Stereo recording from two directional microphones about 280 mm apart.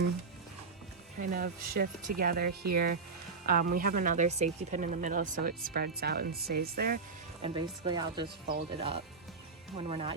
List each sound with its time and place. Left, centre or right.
1.2 s speech: right
7.4 s speech: centre